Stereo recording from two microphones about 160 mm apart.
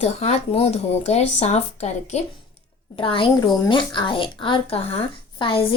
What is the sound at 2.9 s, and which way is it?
A woman's voice, 35° left (ahead or behind).